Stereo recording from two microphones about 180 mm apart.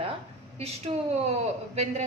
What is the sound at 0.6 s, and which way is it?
Speech, 35° right (ahead or behind).